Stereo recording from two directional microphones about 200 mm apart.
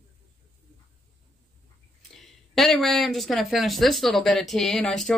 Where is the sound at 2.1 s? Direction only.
Centre (ahead or behind).